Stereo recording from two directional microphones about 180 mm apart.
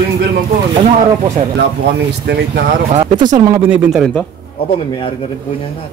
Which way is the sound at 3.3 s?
20° right (ahead or behind).